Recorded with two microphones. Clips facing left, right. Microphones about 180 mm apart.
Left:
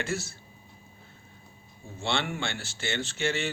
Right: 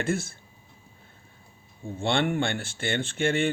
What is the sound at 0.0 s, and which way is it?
Speech, 50° right (ahead or behind).